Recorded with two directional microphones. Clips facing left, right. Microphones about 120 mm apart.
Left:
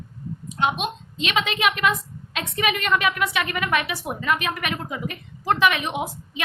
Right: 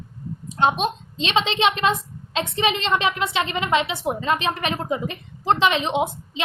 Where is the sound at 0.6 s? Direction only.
30° right (ahead or behind).